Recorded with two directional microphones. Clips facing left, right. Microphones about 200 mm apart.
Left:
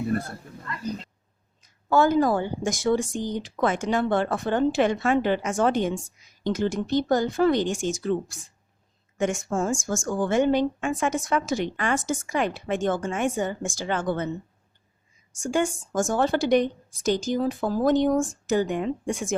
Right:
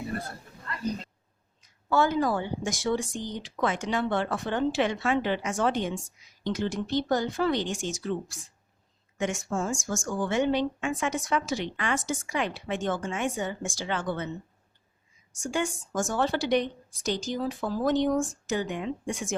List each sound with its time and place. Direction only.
1.9 s a woman's voice: 45° left (ahead or behind)
15.4 s a woman's voice: 45° left (ahead or behind)